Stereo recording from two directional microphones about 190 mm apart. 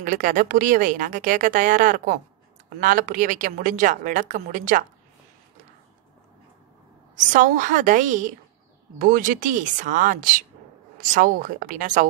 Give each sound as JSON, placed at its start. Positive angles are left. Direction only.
{"t": 0.0, "sound": "a woman's voice", "side_deg": -45}
{"t": 7.3, "sound": "a woman's voice", "side_deg": -45}